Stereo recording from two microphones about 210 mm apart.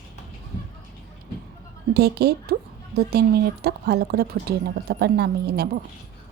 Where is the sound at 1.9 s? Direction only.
50° right (ahead or behind).